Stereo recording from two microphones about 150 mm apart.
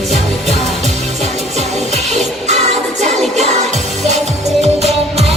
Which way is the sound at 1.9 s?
50° right (ahead or behind).